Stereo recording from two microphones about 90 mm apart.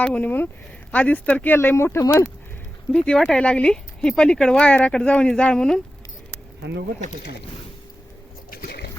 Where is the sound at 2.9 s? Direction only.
10° left (ahead or behind).